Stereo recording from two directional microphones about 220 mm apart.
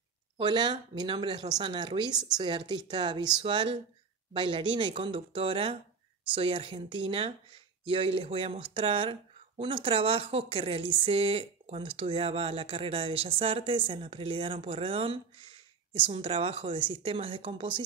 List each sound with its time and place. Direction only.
0.4 s speech: 20° right (ahead or behind)